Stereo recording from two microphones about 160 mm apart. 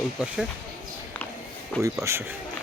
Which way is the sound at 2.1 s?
15° right (ahead or behind).